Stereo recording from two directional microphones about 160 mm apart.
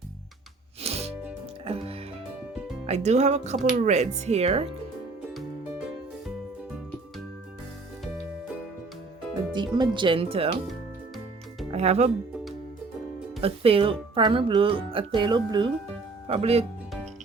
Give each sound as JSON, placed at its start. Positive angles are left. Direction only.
{"t": 0.8, "sound": "music", "side_deg": -40}
{"t": 2.8, "sound": "speech", "side_deg": -45}
{"t": 9.5, "sound": "speech", "side_deg": -30}
{"t": 11.7, "sound": "speech", "side_deg": -40}
{"t": 13.4, "sound": "speech", "side_deg": -35}